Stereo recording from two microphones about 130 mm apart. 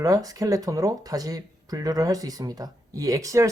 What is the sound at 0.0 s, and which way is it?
Speech, 25° right (ahead or behind).